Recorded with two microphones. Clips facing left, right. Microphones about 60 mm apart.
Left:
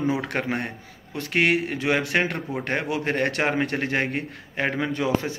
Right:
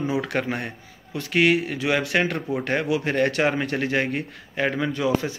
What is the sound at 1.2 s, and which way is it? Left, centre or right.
Speech, left.